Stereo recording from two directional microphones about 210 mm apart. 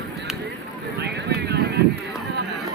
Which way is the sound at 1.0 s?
50° right (ahead or behind).